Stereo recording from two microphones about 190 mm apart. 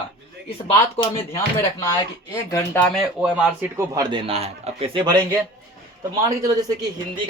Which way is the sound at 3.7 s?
20° right (ahead or behind).